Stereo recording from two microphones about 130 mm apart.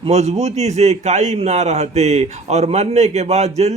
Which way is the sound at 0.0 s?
55° right (ahead or behind).